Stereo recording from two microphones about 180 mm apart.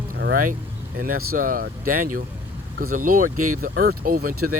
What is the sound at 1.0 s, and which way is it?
Speech, 50° right (ahead or behind).